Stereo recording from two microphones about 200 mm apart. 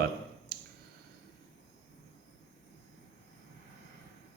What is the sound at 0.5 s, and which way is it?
Finger snapping, 50° right (ahead or behind).